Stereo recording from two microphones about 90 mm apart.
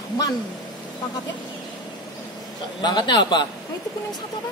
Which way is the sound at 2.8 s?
55° left (ahead or behind).